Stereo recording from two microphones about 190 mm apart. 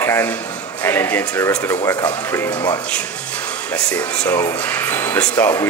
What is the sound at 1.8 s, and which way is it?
Speech, 20° left (ahead or behind).